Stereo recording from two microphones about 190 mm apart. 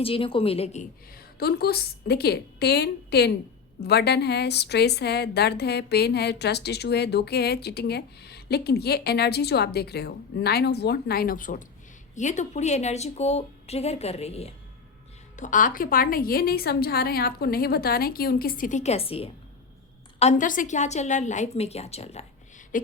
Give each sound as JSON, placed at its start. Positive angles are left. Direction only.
{"t": 0.0, "sound": "a woman's voice", "side_deg": 30}
{"t": 1.1, "sound": "a woman's voice", "side_deg": 55}
{"t": 22.7, "sound": "a woman's voice", "side_deg": 45}